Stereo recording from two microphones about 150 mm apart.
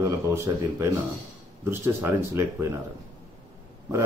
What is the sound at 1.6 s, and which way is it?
Speech, 15° right (ahead or behind).